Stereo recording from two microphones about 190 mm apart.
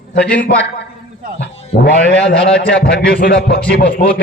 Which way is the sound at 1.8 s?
55° left (ahead or behind).